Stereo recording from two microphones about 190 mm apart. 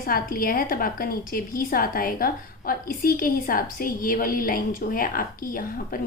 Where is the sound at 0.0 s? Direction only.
50° left (ahead or behind).